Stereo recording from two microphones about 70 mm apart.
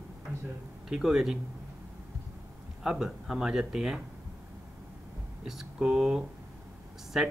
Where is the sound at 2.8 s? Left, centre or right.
Centre.